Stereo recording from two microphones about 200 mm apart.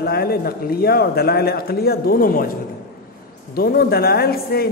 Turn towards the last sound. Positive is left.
turn(degrees=50)  # may be behind; listen again after turning